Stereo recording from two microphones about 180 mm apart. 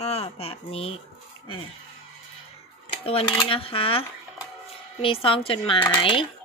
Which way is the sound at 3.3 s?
25° left (ahead or behind).